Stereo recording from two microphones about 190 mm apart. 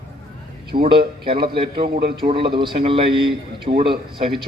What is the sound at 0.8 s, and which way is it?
A man's voice, 25° right (ahead or behind).